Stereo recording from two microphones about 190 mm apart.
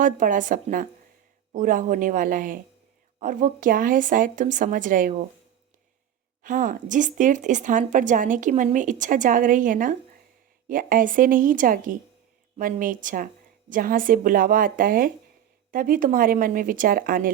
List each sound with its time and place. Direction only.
0.0 s speech: 45° right (ahead or behind)
6.4 s speech: 45° right (ahead or behind)